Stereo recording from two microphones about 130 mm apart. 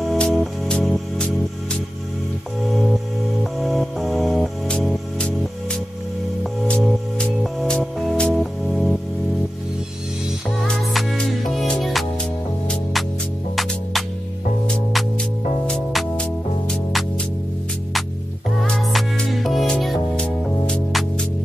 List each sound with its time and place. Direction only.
0.0 s music: 5° left (ahead or behind)
2.7 s music: centre (ahead or behind)
10.7 s music: centre (ahead or behind)
14.7 s music: centre (ahead or behind)
18.6 s music: centre (ahead or behind)